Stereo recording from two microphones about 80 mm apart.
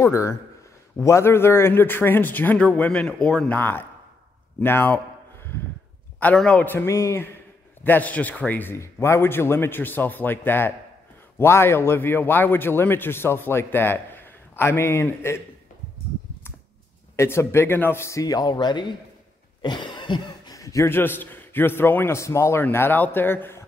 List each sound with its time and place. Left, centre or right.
0.0 s a man's voice: left; by 3.5 s centre
3.5 s a man's voice: left
6.3 s a man's voice: centre
6.7 s a man's voice: left
7.8 s a man's voice: left
8.7 s a man's voice: left
17.1 s a man's voice: left
18.2 s chopping: left
19.6 s a sound: left
20.5 s a man's voice: left
20.9 s a man's voice: left
22.6 s a man's voice: left